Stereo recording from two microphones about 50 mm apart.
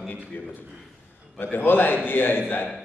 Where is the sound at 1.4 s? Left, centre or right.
Left.